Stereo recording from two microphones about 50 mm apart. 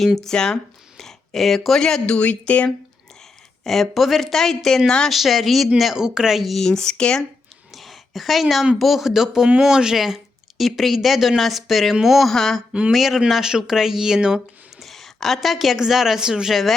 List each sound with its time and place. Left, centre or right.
0.3 s speech: centre
1.8 s speech: centre
2.4 s speech: left
3.6 s a woman's voice: centre
5.1 s a woman's voice: centre
6.7 s speech: centre
7.7 s a sound: centre
8.8 s a woman's voice: centre
12.3 s speech: centre
12.9 s speech: centre
14.8 s a woman's voice: centre